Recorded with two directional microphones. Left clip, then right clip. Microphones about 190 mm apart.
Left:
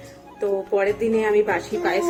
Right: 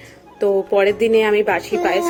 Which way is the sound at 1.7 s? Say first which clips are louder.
Right 4 dB; 45° right (ahead or behind).